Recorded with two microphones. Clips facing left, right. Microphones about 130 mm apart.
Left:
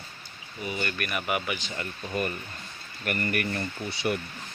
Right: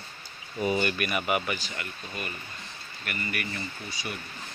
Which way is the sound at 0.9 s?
Centre (ahead or behind).